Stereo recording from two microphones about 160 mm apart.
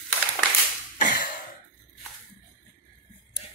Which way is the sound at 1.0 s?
55° left (ahead or behind).